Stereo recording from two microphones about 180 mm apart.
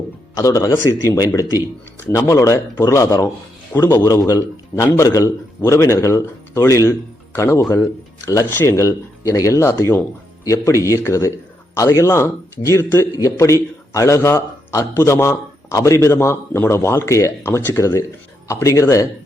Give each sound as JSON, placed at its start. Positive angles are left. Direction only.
{"t": 0.3, "sound": "a man's voice", "side_deg": 20}